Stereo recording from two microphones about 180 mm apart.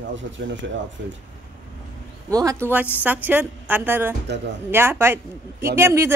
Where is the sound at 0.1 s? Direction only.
90° right.